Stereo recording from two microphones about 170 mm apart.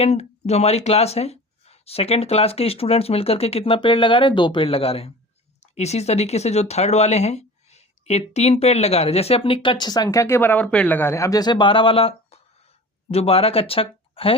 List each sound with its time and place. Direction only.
0.0 s speech: 40° left (ahead or behind)